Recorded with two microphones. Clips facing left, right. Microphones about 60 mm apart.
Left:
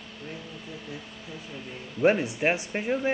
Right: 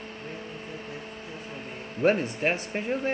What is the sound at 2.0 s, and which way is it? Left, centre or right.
Speech, centre.